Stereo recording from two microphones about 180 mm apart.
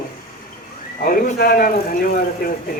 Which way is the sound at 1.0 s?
55° left (ahead or behind).